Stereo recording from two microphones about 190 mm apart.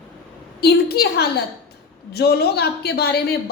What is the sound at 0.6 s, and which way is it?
A woman's voice, 55° left (ahead or behind).